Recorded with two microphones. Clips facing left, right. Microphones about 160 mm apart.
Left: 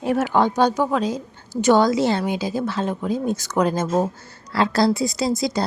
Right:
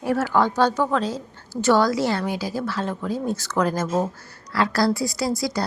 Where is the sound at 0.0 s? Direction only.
20° left (ahead or behind).